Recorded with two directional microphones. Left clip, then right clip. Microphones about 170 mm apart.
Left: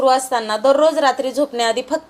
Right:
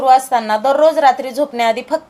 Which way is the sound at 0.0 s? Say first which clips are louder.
Right 4 dB; 30° left (ahead or behind).